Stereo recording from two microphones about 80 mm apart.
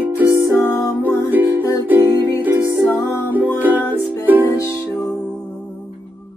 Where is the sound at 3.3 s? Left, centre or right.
Right.